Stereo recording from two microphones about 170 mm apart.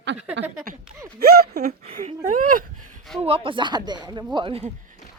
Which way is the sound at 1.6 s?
45° right (ahead or behind).